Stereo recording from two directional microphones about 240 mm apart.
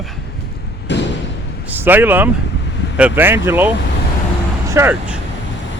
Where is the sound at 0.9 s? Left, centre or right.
Left.